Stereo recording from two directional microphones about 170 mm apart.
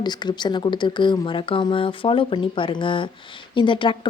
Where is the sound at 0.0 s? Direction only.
25° left (ahead or behind).